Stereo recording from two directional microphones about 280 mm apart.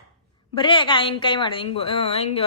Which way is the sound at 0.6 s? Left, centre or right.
Centre.